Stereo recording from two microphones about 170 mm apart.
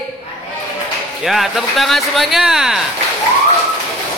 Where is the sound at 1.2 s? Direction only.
Centre (ahead or behind).